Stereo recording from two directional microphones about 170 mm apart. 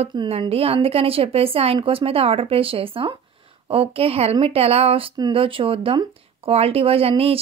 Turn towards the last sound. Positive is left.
turn(degrees=-35)  # may be behind; listen again after turning